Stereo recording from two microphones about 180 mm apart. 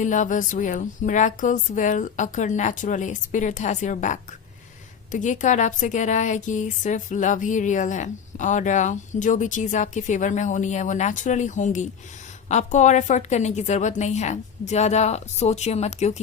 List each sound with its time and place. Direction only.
0.0 s a woman's voice: 45° left (ahead or behind)